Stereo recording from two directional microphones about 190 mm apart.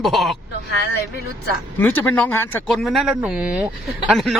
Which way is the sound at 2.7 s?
Centre (ahead or behind).